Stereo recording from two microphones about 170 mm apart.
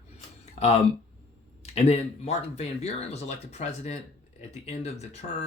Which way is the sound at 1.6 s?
40° left (ahead or behind).